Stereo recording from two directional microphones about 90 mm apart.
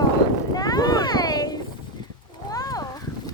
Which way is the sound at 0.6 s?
50° left (ahead or behind).